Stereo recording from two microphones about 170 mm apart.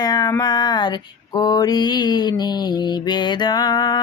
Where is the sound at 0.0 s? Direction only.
25° left (ahead or behind).